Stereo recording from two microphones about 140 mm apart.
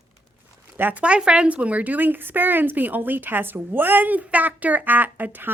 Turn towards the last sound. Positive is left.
turn(degrees=-15)  # may be behind; listen again after turning